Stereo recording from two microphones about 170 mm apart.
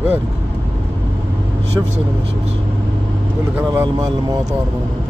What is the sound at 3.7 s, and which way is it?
Vehicle, 20° right (ahead or behind).